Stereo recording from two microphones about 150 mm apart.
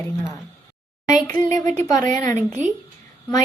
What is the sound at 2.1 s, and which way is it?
Speech, 20° left (ahead or behind).